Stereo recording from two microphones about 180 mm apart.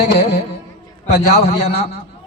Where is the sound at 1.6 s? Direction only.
40° left (ahead or behind).